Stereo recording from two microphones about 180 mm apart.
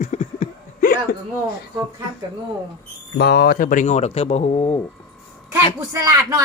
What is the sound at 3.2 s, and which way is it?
Speech, 65° left (ahead or behind).